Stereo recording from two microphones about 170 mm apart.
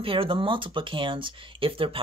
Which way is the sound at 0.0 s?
30° right (ahead or behind).